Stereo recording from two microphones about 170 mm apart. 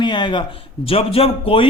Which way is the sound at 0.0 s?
25° left (ahead or behind).